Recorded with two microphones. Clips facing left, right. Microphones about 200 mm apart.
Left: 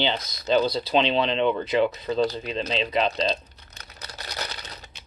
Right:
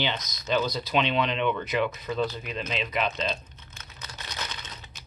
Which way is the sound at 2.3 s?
30° left (ahead or behind).